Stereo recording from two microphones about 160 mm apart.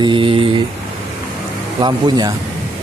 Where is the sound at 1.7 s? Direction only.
30° right (ahead or behind).